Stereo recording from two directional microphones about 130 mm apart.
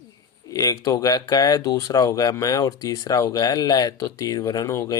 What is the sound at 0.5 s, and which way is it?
Speech, 25° left (ahead or behind).